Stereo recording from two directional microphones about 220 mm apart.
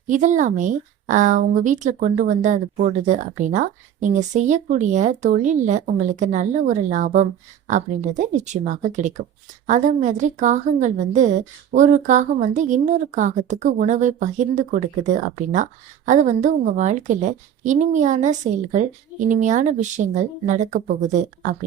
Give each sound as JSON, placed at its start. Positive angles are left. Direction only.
{"t": 0.1, "sound": "a woman's voice", "side_deg": -35}